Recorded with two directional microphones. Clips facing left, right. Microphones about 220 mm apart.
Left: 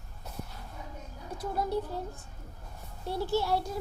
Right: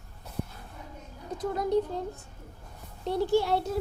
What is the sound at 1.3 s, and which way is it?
Speech, 15° right (ahead or behind).